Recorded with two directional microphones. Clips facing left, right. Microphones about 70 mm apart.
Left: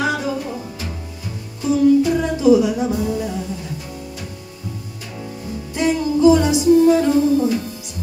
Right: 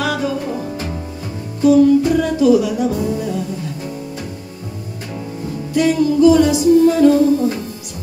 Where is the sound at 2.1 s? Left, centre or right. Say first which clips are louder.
Right 1 dB; centre.